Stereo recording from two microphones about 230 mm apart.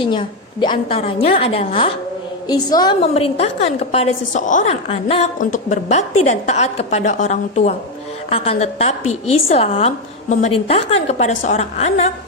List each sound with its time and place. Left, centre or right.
0.0 s a woman's voice: left